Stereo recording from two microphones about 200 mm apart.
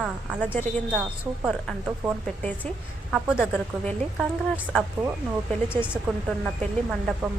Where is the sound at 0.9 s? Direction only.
5° right (ahead or behind).